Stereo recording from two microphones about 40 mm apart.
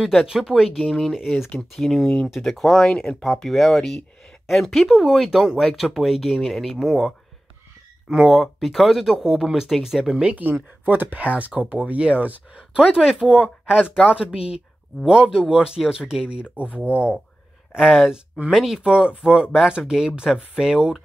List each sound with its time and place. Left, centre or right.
0.1 s speech: centre
6.8 s speech: centre
10.3 s speech: right
11.1 s speech: right
12.7 s speech: right
16.7 s speech: right
17.7 s speech: centre
18.8 s speech: right